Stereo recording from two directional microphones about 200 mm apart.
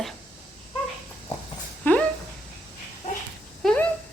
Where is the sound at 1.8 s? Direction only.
10° left (ahead or behind).